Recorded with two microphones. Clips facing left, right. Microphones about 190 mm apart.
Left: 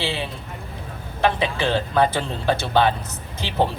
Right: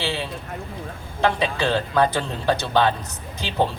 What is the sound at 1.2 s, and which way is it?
Speech, 15° left (ahead or behind).